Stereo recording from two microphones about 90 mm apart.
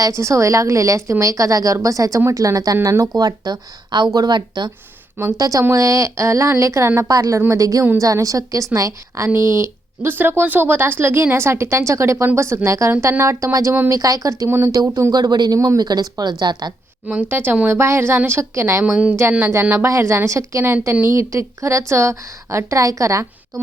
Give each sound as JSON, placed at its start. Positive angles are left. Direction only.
{"t": 0.0, "sound": "a woman's voice", "side_deg": -35}
{"t": 5.4, "sound": "a woman's voice", "side_deg": -40}
{"t": 15.1, "sound": "speech", "side_deg": -50}
{"t": 15.5, "sound": "a woman's voice", "side_deg": -35}
{"t": 15.8, "sound": "speech", "side_deg": -45}
{"t": 17.1, "sound": "speech", "side_deg": -20}
{"t": 18.9, "sound": "a woman's voice", "side_deg": -10}
{"t": 19.8, "sound": "a woman's voice", "side_deg": -30}